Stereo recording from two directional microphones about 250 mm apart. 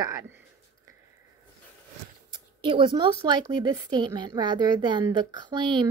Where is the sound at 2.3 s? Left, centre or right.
Centre.